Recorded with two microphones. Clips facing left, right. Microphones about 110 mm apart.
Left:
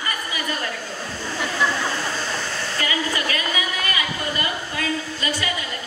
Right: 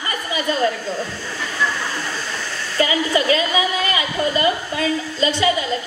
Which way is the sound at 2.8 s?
25° right (ahead or behind).